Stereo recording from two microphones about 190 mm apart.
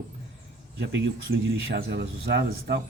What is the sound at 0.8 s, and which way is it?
Speech, 55° right (ahead or behind).